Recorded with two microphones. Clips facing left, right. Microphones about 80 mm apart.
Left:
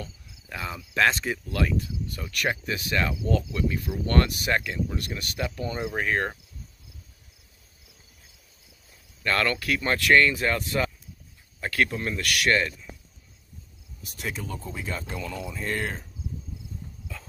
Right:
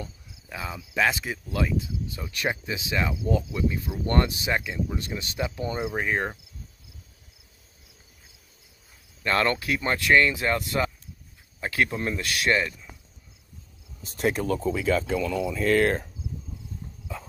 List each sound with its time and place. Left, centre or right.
0.0 s cricket: centre
2.5 s speech: centre
5.8 s speech: centre
9.2 s speech: right
14.0 s speech: right
14.5 s speech: right